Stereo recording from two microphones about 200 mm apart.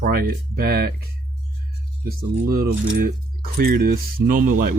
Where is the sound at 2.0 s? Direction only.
50° right (ahead or behind).